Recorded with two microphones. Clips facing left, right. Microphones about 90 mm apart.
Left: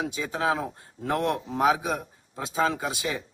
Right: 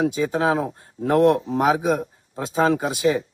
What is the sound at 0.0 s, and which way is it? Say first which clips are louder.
Speech: right 7 dB; 40° right (ahead or behind).